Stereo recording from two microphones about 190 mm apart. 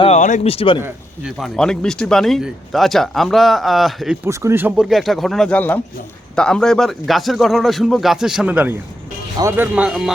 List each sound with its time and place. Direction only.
0.0 s a man's voice: 40° left (ahead or behind)
0.8 s speech: 10° right (ahead or behind)
1.4 s speech: 5° left (ahead or behind)
4.3 s speech: 15° right (ahead or behind)